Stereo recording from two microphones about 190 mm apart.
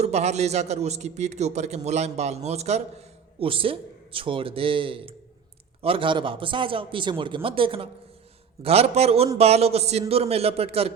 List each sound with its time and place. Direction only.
0.0 s a man's voice: 35° right (ahead or behind)